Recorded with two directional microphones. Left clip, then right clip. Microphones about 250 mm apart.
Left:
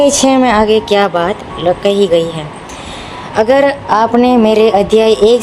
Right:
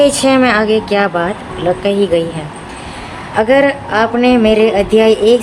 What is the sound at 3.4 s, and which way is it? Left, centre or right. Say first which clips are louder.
Speech: left 1 dB; centre.